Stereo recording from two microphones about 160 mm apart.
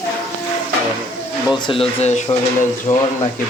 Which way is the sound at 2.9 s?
45° left (ahead or behind).